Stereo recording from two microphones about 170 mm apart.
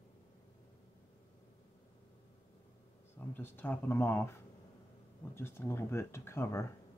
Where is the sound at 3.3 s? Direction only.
10° left (ahead or behind).